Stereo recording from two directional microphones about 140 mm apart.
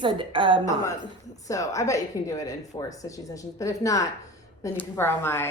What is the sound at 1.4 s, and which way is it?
A woman's voice, 25° left (ahead or behind).